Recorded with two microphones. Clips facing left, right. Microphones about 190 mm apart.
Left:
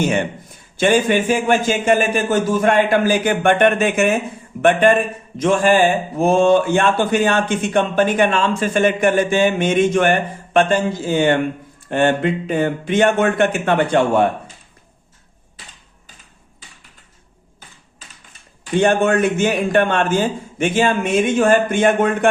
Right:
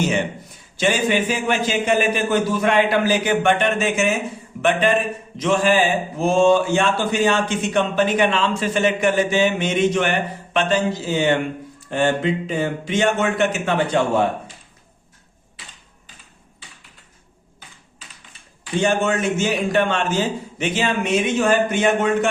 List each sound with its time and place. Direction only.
0.0 s speech: 55° left (ahead or behind)
18.6 s speech: 55° left (ahead or behind)